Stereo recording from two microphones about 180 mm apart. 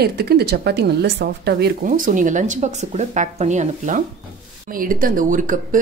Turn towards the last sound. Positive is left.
turn(degrees=-45)  # may be behind; listen again after turning